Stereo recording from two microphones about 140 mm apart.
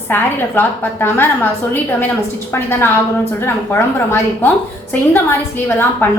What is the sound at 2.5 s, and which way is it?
A woman's voice, 15° left (ahead or behind).